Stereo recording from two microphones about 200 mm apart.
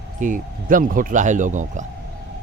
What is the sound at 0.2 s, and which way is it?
A man's voice, 40° right (ahead or behind).